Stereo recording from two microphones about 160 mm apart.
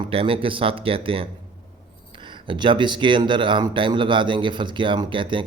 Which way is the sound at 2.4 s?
30° right (ahead or behind).